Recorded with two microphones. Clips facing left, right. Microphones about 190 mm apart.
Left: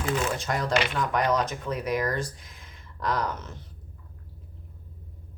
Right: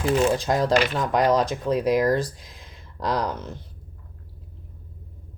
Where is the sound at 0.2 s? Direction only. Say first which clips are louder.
Right 8 dB; 35° right (ahead or behind).